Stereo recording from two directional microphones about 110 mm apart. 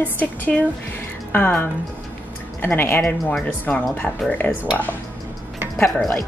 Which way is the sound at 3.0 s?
5° left (ahead or behind).